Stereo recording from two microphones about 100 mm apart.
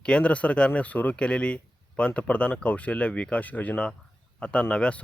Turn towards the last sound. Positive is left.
turn(degrees=10)  # may be behind; listen again after turning